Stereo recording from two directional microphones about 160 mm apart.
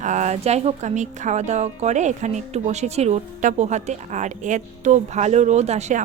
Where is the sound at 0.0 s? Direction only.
50° right (ahead or behind).